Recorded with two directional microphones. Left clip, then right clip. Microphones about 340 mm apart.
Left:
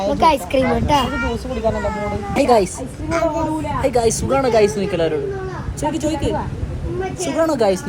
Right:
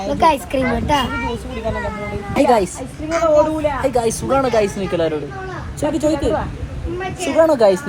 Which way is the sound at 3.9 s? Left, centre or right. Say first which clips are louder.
Even; centre.